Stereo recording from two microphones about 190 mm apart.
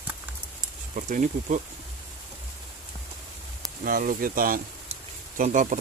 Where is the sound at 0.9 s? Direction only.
45° right (ahead or behind).